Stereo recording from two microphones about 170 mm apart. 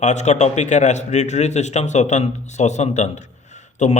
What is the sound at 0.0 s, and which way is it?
A man's voice, 45° left (ahead or behind).